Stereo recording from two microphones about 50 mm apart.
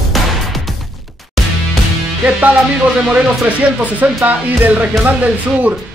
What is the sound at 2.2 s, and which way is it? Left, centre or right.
Music, right.